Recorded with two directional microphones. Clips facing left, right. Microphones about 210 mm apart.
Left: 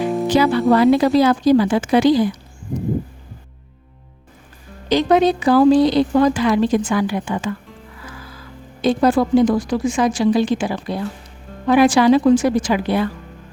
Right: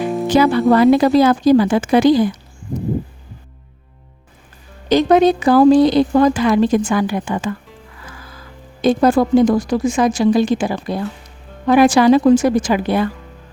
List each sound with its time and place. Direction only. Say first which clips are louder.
0.0 s music: even; centre (ahead or behind)
0.3 s speech: right 3 dB; 50° right (ahead or behind)
4.9 s speech: right 3 dB; 45° right (ahead or behind)
8.8 s speech: right 2 dB; 45° right (ahead or behind)